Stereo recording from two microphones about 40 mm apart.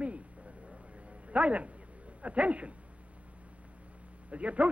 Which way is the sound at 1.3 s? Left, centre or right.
Right.